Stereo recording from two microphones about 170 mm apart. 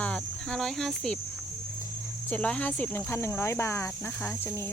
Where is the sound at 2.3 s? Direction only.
10° left (ahead or behind).